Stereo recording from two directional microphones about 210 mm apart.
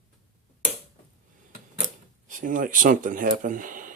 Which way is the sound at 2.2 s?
40° right (ahead or behind).